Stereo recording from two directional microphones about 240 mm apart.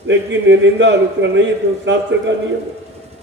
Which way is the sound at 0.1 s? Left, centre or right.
Right.